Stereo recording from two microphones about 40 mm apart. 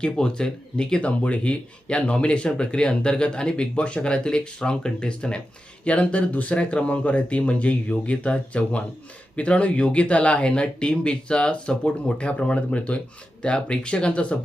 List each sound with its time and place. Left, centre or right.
0.0 s speech: left
1.0 s speech: left